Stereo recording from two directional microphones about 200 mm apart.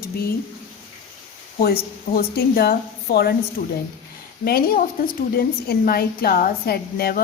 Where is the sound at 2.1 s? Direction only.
50° left (ahead or behind).